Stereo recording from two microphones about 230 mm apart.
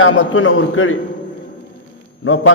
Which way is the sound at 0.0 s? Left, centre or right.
Left.